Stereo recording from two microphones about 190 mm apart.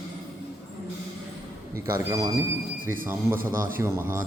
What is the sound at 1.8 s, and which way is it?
A man's voice, 15° right (ahead or behind).